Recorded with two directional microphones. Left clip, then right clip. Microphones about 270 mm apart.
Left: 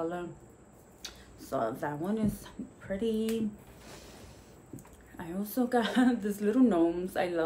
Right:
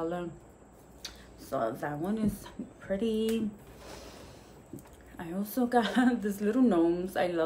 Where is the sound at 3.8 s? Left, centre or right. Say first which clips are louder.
Right 4 dB; centre.